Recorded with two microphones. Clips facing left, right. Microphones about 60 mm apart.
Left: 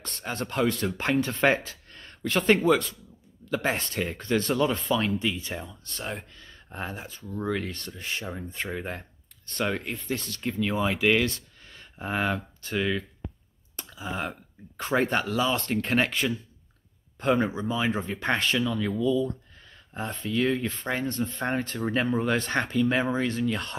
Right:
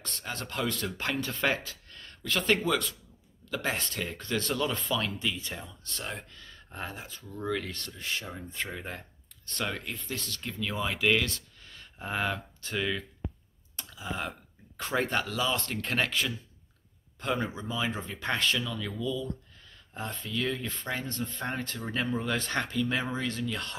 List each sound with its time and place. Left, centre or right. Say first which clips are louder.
0.0 s speech: left 5 dB; left; by 13.0 s centre
13.7 s a sound: left 3 dB; centre
14.8 s speech: left 4 dB; centre